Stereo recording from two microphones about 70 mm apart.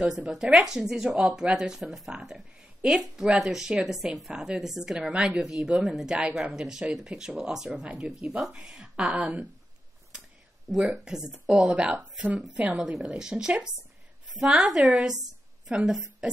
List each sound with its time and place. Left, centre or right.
0.3 s speech: centre
7.7 s speech: centre
10.8 s speech: centre
11.6 s speech: centre
12.7 s a woman's voice: centre